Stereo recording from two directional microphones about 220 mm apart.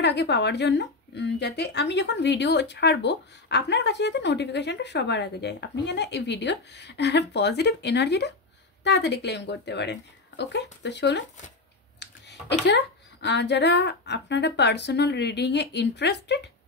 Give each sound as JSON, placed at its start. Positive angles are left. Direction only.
{"t": 0.0, "sound": "speech", "side_deg": 50}